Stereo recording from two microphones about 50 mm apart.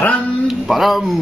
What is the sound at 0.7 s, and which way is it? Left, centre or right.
Speech, centre.